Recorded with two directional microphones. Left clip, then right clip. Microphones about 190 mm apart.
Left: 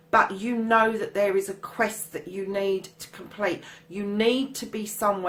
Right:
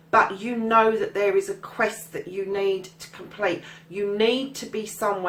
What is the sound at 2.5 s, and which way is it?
Speech, 45° left (ahead or behind).